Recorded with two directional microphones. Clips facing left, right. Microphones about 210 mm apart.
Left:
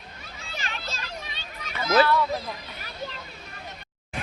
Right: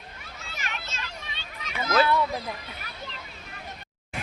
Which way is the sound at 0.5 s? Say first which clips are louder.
Left 2 dB; 30° left (ahead or behind).